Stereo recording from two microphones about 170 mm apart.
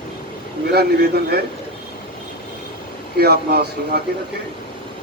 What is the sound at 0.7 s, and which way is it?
Speech, 65° right (ahead or behind).